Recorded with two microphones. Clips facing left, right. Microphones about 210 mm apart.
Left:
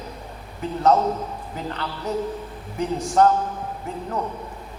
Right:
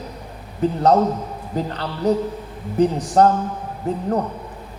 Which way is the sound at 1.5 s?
35° right (ahead or behind).